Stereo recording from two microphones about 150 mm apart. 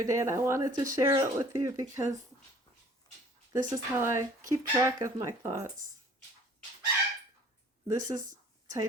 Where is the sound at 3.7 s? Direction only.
20° right (ahead or behind).